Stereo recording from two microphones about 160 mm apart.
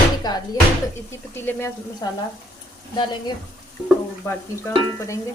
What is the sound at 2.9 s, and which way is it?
Speech, 30° left (ahead or behind).